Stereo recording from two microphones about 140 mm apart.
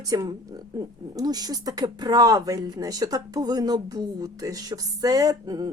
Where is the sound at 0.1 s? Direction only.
25° right (ahead or behind).